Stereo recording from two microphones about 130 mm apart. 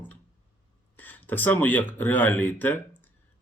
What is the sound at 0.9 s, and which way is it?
Speech, 15° left (ahead or behind).